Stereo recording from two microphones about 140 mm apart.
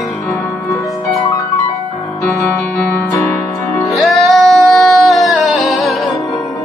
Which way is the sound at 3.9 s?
Centre (ahead or behind).